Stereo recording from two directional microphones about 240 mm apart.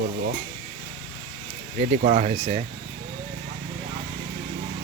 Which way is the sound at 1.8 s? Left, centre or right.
Right.